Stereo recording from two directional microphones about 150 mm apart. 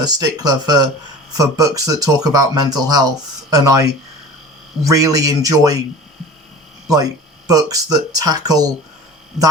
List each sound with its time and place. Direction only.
0.0 s speech: 25° right (ahead or behind)
6.8 s speech: 25° right (ahead or behind)